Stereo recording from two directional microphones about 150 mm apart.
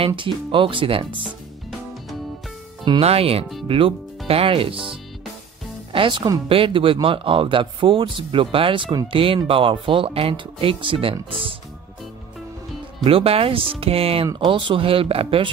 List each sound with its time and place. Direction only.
0.0 s speech: 35° right (ahead or behind)
2.8 s speech: 35° right (ahead or behind)
5.9 s speech: 35° right (ahead or behind)
13.0 s speech: 40° right (ahead or behind)